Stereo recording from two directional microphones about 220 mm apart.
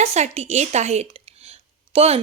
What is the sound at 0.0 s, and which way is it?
A woman's voice, 30° right (ahead or behind).